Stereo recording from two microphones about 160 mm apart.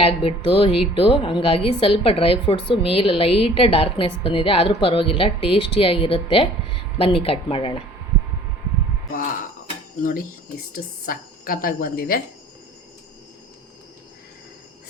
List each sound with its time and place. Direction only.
0.0 s a woman's voice: 35° left (ahead or behind)
10.0 s a woman's voice: 60° left (ahead or behind)